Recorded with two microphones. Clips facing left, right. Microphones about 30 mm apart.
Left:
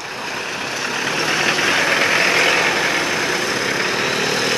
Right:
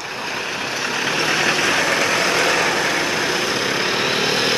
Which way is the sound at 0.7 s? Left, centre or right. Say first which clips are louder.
Even; centre.